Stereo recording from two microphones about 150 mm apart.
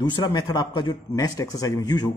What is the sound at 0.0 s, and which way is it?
Speech, 30° left (ahead or behind).